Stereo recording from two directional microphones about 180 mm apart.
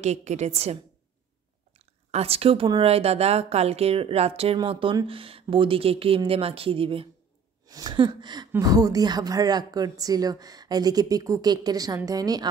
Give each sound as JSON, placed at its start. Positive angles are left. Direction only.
{"t": 0.0, "sound": "speech", "side_deg": -40}
{"t": 2.0, "sound": "a woman's voice", "side_deg": -35}